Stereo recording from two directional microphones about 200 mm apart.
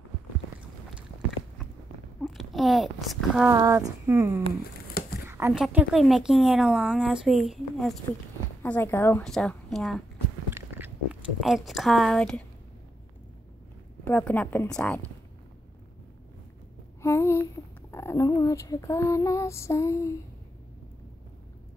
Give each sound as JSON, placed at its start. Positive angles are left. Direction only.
{"t": 2.1, "sound": "speech", "side_deg": 0}
{"t": 3.4, "sound": "female singing", "side_deg": -15}
{"t": 5.0, "sound": "a sound", "side_deg": 50}
{"t": 5.5, "sound": "a woman's voice", "side_deg": -5}
{"t": 8.6, "sound": "female singing", "side_deg": 10}
{"t": 9.2, "sound": "a woman's voice", "side_deg": 0}
{"t": 14.0, "sound": "female singing", "side_deg": 5}
{"t": 17.0, "sound": "a sound", "side_deg": 15}
{"t": 17.9, "sound": "female singing", "side_deg": 15}